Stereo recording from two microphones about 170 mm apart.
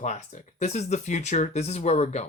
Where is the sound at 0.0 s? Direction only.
45° left (ahead or behind).